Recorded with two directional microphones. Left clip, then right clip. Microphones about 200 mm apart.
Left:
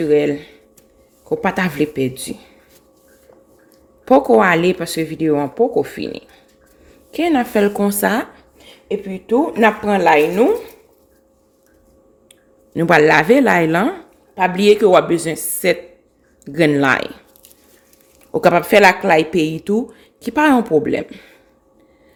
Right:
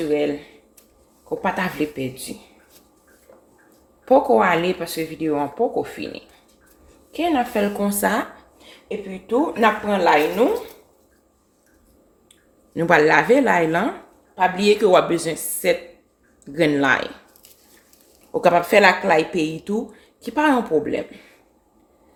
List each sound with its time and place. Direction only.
0.1 s speech: 50° left (ahead or behind)
4.0 s speech: 50° left (ahead or behind)
9.0 s speech: 55° left (ahead or behind)
12.7 s a woman's voice: 40° left (ahead or behind)
18.3 s speech: 45° left (ahead or behind)